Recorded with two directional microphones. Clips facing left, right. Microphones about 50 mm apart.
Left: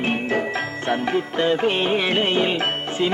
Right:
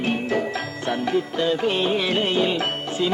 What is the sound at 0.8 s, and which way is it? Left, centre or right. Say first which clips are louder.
Music: even; left.